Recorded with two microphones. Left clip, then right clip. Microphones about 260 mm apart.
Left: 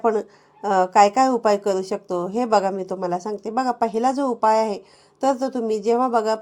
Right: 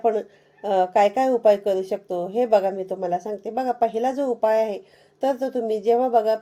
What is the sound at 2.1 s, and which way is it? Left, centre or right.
Speech, left.